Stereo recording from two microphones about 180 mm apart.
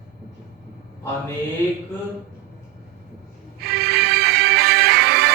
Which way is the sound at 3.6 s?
60° right (ahead or behind).